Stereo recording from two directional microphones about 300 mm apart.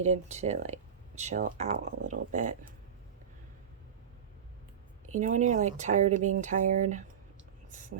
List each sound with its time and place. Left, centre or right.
0.0 s speech: right
5.2 s speech: right